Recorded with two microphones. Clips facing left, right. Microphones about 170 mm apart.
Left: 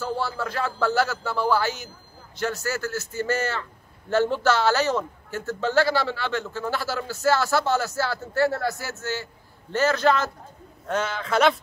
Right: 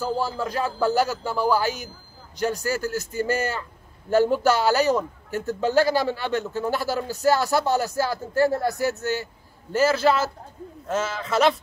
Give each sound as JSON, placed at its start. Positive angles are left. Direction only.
{"t": 0.4, "sound": "a man's voice", "side_deg": -15}